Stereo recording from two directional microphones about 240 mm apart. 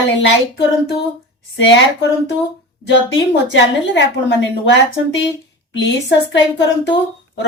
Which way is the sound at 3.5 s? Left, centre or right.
Left.